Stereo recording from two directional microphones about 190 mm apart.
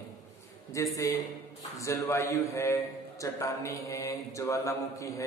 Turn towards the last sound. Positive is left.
turn(degrees=15)  # may be behind; listen again after turning